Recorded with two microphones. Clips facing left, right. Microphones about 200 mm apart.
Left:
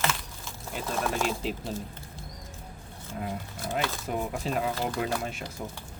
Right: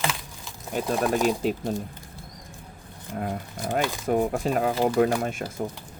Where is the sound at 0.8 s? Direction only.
15° right (ahead or behind).